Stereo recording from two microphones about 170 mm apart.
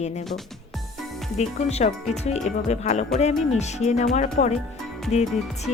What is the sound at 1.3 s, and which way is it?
Speech, 40° left (ahead or behind).